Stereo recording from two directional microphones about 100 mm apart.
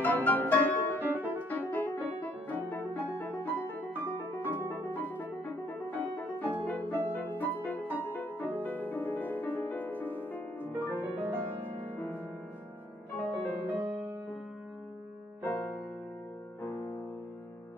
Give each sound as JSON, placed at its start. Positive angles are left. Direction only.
{"t": 0.0, "sound": "music", "side_deg": 15}
{"t": 0.9, "sound": "music", "side_deg": -20}
{"t": 1.5, "sound": "music", "side_deg": 20}
{"t": 4.0, "sound": "piano", "side_deg": 20}
{"t": 4.6, "sound": "music", "side_deg": 20}
{"t": 10.7, "sound": "music", "side_deg": -20}
{"t": 11.9, "sound": "music", "side_deg": 20}
{"t": 13.3, "sound": "music", "side_deg": -20}
{"t": 16.6, "sound": "music", "side_deg": 20}